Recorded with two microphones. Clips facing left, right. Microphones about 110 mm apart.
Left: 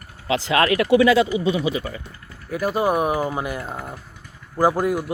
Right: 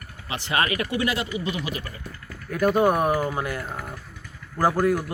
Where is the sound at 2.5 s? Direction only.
5° left (ahead or behind).